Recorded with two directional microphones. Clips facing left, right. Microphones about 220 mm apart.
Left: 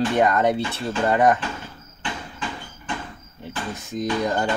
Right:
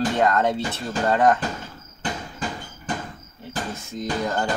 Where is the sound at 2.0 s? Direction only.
40° right (ahead or behind).